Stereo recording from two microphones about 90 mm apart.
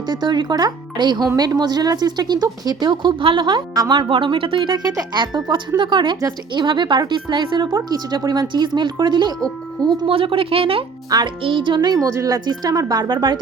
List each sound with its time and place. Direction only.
0.0 s speech: 55° right (ahead or behind)
3.8 s speech: 50° right (ahead or behind)
4.1 s speech: 75° right (ahead or behind); by 7.8 s 60° right (ahead or behind)
7.9 s speech: 45° right (ahead or behind)
10.1 s a woman's voice: 90° right
11.1 s speech: 45° right (ahead or behind)
11.4 s speech: 65° right (ahead or behind)